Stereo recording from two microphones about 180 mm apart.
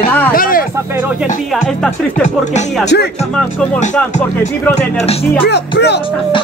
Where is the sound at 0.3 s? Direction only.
50° left (ahead or behind).